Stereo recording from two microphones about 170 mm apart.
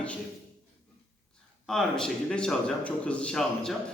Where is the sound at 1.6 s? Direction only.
Centre (ahead or behind).